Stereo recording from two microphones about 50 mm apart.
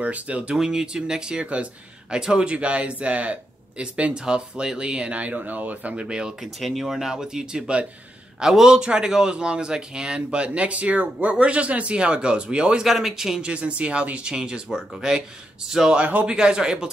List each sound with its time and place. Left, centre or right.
0.0 s a man's voice: right
0.6 s a man's voice: centre; by 5.9 s right
5.9 s a man's voice: centre
6.4 s a man's voice: centre; by 12.8 s right
12.8 s speech: centre
13.5 s a man's voice: right
16.0 s a man's voice: right
16.3 s speech: centre